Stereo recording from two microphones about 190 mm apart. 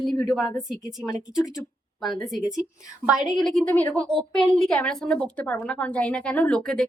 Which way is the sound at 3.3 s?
Centre (ahead or behind).